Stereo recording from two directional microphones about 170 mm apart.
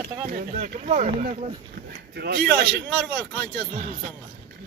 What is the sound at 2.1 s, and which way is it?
Speech, 70° right (ahead or behind).